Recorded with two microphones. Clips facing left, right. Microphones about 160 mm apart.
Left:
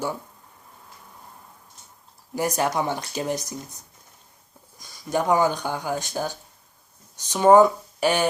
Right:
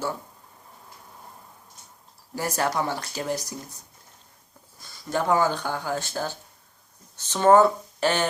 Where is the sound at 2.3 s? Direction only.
15° left (ahead or behind).